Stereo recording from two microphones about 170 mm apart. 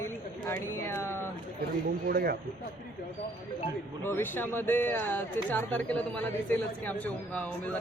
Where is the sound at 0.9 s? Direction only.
15° left (ahead or behind).